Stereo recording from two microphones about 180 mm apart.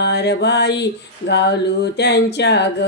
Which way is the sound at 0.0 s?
70° left (ahead or behind).